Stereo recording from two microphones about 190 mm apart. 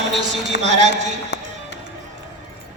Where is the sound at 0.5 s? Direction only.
65° left (ahead or behind).